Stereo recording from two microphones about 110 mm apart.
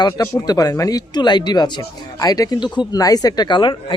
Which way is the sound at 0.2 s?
35° left (ahead or behind).